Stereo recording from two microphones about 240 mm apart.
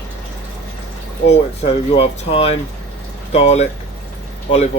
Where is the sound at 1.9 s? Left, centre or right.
Left.